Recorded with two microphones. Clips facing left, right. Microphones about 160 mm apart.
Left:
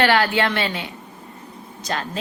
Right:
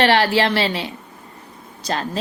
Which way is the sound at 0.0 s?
30° right (ahead or behind).